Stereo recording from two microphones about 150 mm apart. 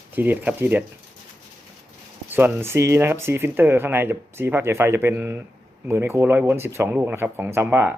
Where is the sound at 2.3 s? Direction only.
15° right (ahead or behind).